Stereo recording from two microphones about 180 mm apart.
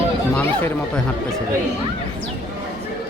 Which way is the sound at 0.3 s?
10° left (ahead or behind).